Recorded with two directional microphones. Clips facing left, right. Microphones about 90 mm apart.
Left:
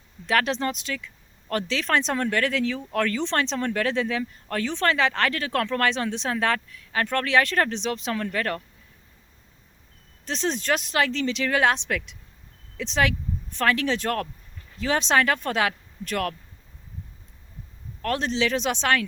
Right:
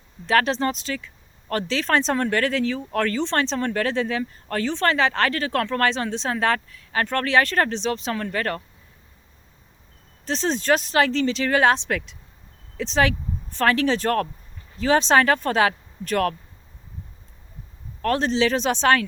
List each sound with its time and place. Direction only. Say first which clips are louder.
0.3 s speech: right 3 dB; 35° right (ahead or behind)
10.2 s speech: right 4 dB; 35° right (ahead or behind)
18.0 s speech: right 4 dB; 40° right (ahead or behind)